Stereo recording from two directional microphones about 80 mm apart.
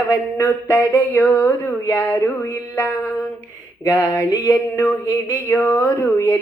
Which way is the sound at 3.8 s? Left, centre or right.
Left.